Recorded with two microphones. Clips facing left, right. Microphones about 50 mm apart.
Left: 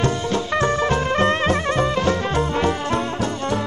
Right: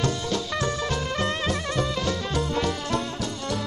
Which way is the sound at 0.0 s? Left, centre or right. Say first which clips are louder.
Left 5 dB; left.